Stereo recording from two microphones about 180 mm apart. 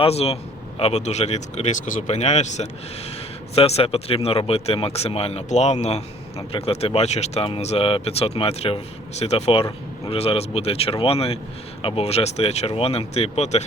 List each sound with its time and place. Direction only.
0.0 s speech: 35° left (ahead or behind)